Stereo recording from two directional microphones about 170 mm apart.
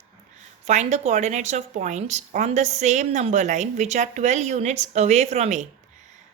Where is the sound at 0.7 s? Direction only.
40° right (ahead or behind).